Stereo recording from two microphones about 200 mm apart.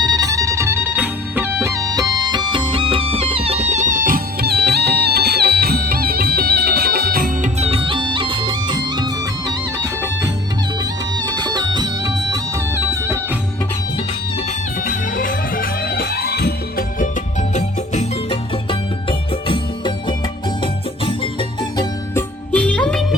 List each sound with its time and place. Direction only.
0.0 s music: 20° right (ahead or behind); by 7.5 s 45° right (ahead or behind)
7.6 s music: 30° right (ahead or behind)
14.8 s music: 45° left (ahead or behind)
17.5 s music: 35° left (ahead or behind); by 22.2 s 20° left (ahead or behind)
22.5 s music: 5° left (ahead or behind)